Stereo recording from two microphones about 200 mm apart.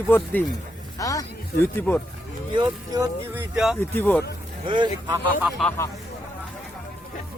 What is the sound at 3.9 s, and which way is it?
Speech, 10° left (ahead or behind).